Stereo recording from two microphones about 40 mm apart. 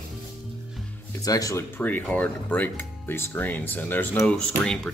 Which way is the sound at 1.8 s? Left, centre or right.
Left.